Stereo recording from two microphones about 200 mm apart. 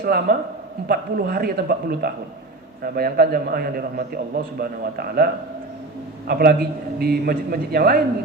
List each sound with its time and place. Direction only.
0.0 s a man's voice: 45° right (ahead or behind)